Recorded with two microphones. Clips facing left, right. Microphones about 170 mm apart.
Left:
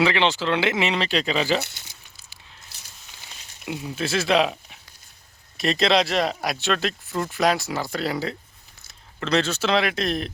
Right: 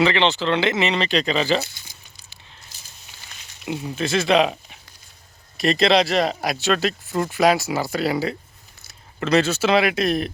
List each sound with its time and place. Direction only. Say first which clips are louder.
0.0 s speech: right 2 dB; 10° left (ahead or behind)
1.6 s crumpling: right 1 dB; 70° left (ahead or behind)
3.7 s speech: right 3 dB; 5° left (ahead or behind)